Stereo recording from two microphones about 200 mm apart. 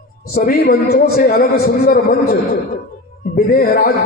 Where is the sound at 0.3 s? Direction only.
50° left (ahead or behind).